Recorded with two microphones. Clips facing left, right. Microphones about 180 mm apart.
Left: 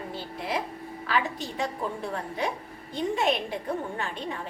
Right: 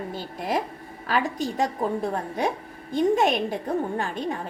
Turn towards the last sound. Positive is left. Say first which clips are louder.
# right 5 dB
turn(degrees=-45)  # may be behind; listen again after turning